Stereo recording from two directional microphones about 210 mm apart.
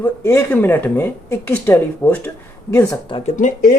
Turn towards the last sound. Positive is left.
turn(degrees=40)  # may be behind; listen again after turning